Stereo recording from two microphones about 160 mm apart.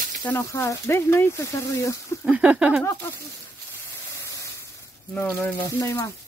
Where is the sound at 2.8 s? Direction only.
20° left (ahead or behind).